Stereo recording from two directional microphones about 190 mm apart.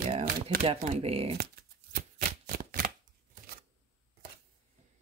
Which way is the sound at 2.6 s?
45° right (ahead or behind).